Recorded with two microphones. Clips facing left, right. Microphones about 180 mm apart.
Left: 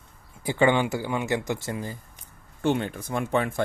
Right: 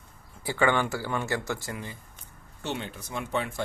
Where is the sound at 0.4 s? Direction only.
20° left (ahead or behind).